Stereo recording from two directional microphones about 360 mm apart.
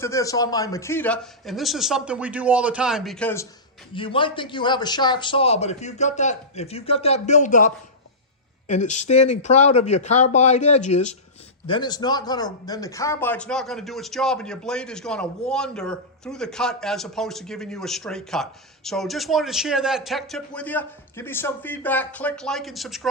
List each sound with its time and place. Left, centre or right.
0.0 s a man's voice: centre